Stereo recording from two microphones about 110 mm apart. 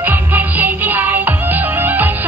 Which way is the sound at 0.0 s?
15° right (ahead or behind).